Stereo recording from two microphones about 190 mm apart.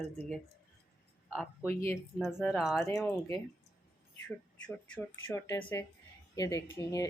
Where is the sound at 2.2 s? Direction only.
5° right (ahead or behind).